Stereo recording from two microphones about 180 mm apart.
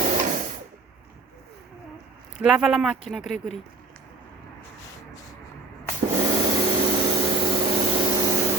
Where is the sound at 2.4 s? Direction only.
5° right (ahead or behind).